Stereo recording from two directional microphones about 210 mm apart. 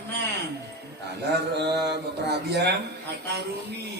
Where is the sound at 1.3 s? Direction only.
55° right (ahead or behind).